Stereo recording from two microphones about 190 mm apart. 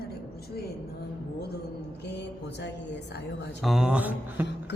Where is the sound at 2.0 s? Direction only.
65° left (ahead or behind).